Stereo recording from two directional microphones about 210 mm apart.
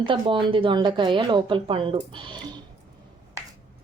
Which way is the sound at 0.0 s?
25° right (ahead or behind).